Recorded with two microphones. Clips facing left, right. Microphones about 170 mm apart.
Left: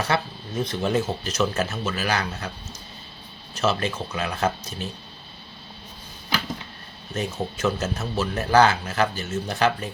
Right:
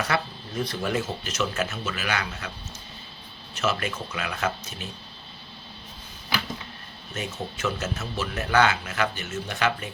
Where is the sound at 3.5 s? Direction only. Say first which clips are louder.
Left 3 dB; 30° left (ahead or behind).